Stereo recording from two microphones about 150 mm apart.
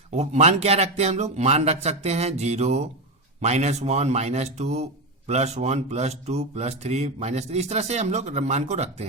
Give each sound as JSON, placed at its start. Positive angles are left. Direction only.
{"t": 0.1, "sound": "speech", "side_deg": -50}